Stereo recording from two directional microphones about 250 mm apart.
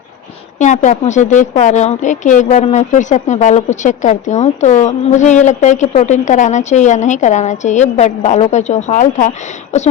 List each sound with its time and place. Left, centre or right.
0.6 s a woman's voice: left